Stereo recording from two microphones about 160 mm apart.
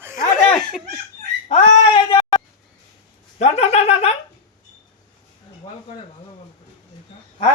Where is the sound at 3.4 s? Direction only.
40° left (ahead or behind).